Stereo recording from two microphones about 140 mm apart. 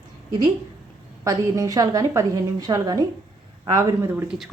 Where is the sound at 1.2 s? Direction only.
25° right (ahead or behind).